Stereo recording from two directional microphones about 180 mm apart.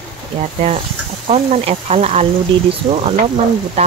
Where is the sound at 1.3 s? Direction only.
35° right (ahead or behind).